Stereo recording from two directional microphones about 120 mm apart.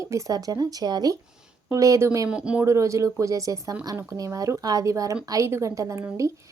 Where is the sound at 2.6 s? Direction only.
25° right (ahead or behind).